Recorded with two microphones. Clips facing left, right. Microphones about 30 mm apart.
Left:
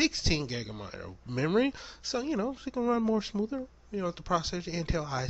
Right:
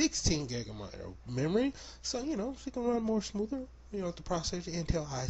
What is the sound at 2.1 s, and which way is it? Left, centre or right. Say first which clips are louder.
Speech: left 4 dB; left.